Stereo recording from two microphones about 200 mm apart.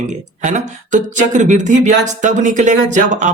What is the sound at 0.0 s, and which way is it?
Speech, 35° right (ahead or behind).